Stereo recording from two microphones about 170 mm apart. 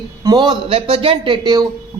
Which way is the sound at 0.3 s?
25° right (ahead or behind).